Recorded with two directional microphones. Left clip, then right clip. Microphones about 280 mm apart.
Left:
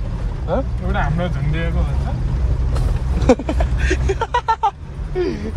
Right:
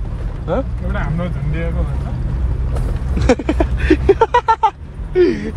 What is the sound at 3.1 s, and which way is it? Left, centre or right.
Speech, right.